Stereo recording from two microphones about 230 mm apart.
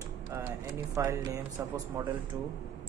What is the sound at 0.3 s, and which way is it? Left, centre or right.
Speech, centre.